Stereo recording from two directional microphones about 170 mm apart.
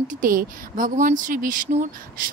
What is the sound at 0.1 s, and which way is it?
A woman's voice, 55° right (ahead or behind).